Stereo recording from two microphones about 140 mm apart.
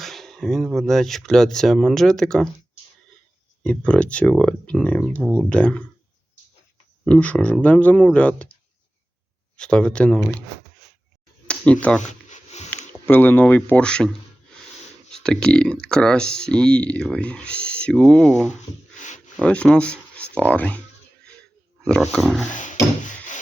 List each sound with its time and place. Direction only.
0.0 s speech: centre (ahead or behind)
3.6 s speech: 10° left (ahead or behind)
7.0 s speech: 10° left (ahead or behind)
9.6 s speech: 5° left (ahead or behind)
11.4 s speech: 10° left (ahead or behind)
12.0 s a sound: 55° left (ahead or behind)
13.1 s speech: 15° left (ahead or behind)
15.1 s speech: 5° left (ahead or behind)
21.8 s speech: 5° left (ahead or behind)
22.5 s wood: 65° left (ahead or behind)